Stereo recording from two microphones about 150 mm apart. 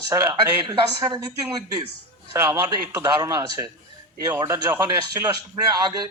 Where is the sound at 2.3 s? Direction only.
20° right (ahead or behind).